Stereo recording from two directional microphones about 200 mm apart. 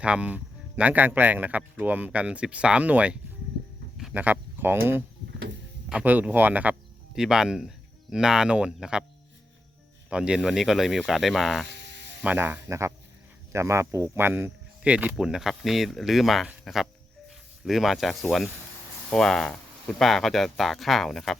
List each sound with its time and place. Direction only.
0.0 s speech: 5° right (ahead or behind)
10.1 s speech: 5° right (ahead or behind)
11.7 s sizzle: 60° right (ahead or behind)
12.2 s speech: 10° right (ahead or behind)